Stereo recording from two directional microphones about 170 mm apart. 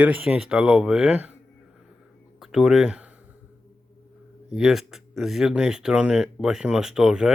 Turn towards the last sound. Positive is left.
turn(degrees=-5)  # may be behind; listen again after turning